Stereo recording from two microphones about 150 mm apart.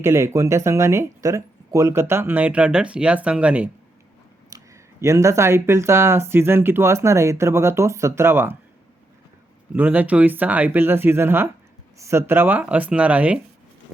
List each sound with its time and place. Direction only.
0.0 s speech: 15° right (ahead or behind)
4.4 s speech: 20° right (ahead or behind)
9.7 s speech: 10° right (ahead or behind)